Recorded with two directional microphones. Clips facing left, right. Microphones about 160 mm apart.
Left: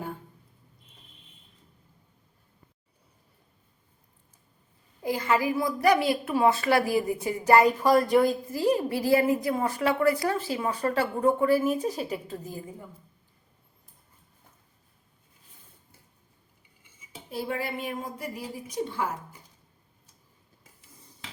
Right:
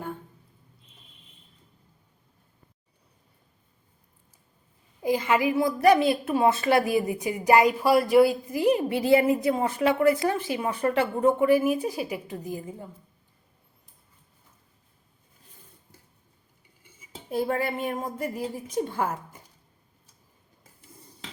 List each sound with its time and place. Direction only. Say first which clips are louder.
5.0 s a woman's voice: right 2 dB; 20° right (ahead or behind)
17.3 s a woman's voice: right 5 dB; 50° right (ahead or behind)